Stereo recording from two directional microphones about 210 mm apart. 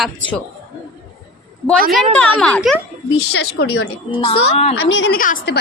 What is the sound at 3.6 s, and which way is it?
Speech, 55° left (ahead or behind).